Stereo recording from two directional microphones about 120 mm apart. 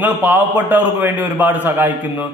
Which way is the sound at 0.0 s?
15° right (ahead or behind).